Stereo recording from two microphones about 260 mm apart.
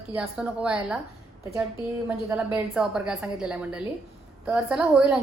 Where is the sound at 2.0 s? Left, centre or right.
Centre.